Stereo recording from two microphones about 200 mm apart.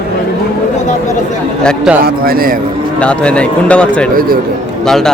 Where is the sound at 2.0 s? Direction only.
45° right (ahead or behind).